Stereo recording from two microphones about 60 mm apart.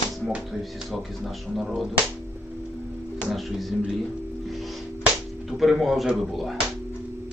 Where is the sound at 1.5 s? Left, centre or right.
Centre.